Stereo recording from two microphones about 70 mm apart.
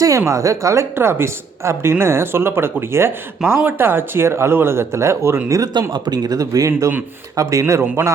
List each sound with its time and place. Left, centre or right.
0.3 s speech: right
5.5 s speech: right
5.9 s a man's voice: right